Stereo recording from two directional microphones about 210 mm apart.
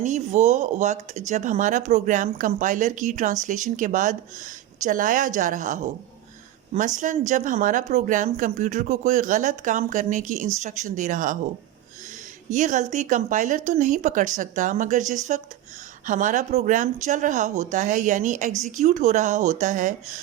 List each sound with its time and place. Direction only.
0.0 s speech: 35° right (ahead or behind)
12.5 s speech: 35° right (ahead or behind)